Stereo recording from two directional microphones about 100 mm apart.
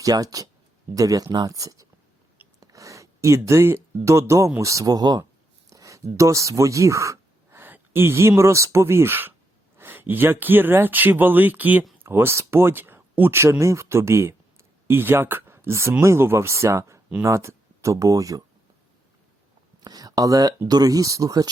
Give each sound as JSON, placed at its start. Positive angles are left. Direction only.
{"t": 0.0, "sound": "speech", "side_deg": -35}
{"t": 5.6, "sound": "a sound", "side_deg": -35}
{"t": 7.6, "sound": "speech", "side_deg": -20}
{"t": 19.8, "sound": "speech", "side_deg": -40}